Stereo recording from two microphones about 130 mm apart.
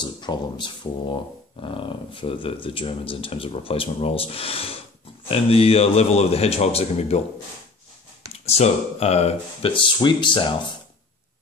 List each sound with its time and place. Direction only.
0.0 s speech: 35° left (ahead or behind); by 7.2 s 55° left (ahead or behind)
8.3 s speech: 55° left (ahead or behind); by 10.5 s 40° left (ahead or behind)